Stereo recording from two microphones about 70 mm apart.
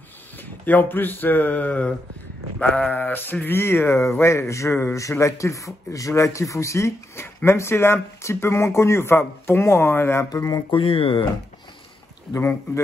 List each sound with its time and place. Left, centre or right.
0.4 s speech: left
2.6 s sheep: centre
3.4 s a man's voice: left
10.3 s speech: left
12.3 s a man's voice: left